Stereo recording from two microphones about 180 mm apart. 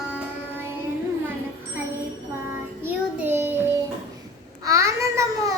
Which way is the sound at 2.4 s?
10° right (ahead or behind).